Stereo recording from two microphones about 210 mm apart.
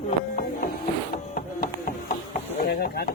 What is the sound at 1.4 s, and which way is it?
Music, 45° left (ahead or behind).